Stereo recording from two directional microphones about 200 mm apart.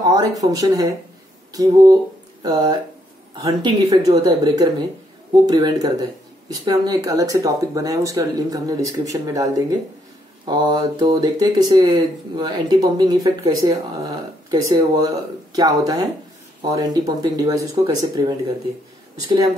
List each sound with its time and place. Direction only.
0.0 s speech: 20° right (ahead or behind)